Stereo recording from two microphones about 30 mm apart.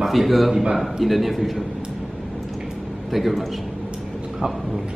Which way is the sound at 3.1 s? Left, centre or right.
Centre.